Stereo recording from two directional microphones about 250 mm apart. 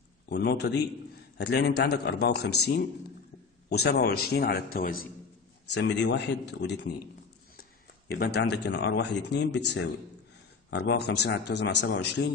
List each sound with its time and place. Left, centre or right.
0.3 s a man's voice: left
3.7 s a man's voice: left
5.7 s speech: left
8.1 s speech: left